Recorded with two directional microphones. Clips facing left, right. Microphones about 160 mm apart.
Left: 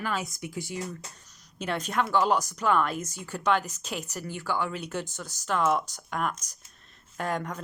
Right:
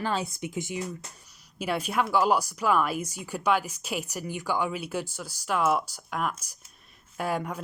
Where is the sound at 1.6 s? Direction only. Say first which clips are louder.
Right 1 dB; 10° right (ahead or behind).